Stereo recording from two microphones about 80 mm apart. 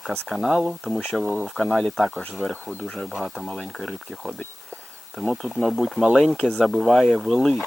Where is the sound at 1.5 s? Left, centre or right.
Centre.